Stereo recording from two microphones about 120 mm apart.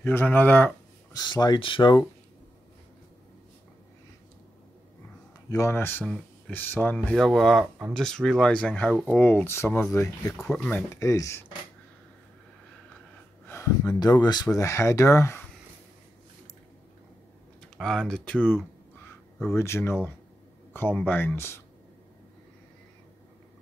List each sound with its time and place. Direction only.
0.0 s speech: 15° left (ahead or behind)
1.1 s speech: 35° left (ahead or behind)
5.5 s speech: 25° left (ahead or behind)
6.0 s a sound: 5° left (ahead or behind)
6.5 s speech: 15° left (ahead or behind)
7.2 s speech: centre (ahead or behind); by 10.3 s 25° left (ahead or behind)
10.3 s speech: 5° left (ahead or behind)
11.0 s speech: 25° left (ahead or behind)
13.5 s speech: 25° left (ahead or behind)
17.7 s speech: 5° left (ahead or behind); by 21.6 s 20° left (ahead or behind)